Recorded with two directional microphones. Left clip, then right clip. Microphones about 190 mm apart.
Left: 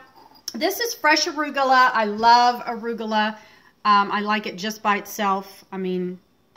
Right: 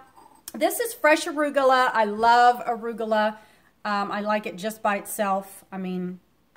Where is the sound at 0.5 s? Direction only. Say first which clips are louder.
Left 1 dB; 40° right (ahead or behind).